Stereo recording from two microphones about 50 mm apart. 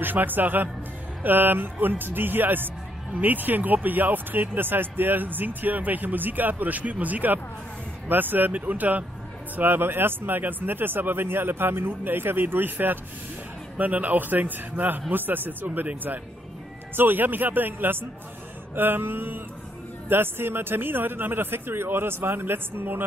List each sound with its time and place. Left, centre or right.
0.0 s speech: right
9.6 s speech: right